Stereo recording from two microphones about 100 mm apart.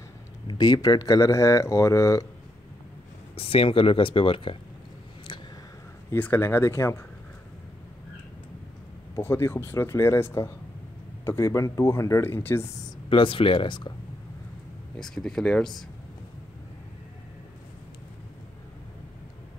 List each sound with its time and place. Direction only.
0.5 s speech: 40° left (ahead or behind)
3.3 s speech: 70° left (ahead or behind)
6.1 s speech: 20° left (ahead or behind)
9.1 s speech: 25° left (ahead or behind)
13.1 s speech: 60° left (ahead or behind)
15.0 s speech: 5° left (ahead or behind)